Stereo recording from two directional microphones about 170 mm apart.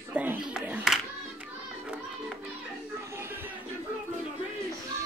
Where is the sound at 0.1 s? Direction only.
10° right (ahead or behind).